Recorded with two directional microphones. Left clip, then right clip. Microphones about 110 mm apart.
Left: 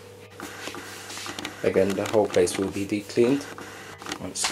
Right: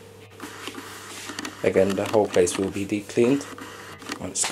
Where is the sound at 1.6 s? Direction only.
10° right (ahead or behind).